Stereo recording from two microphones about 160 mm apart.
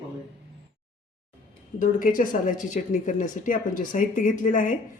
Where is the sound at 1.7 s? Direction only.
55° left (ahead or behind).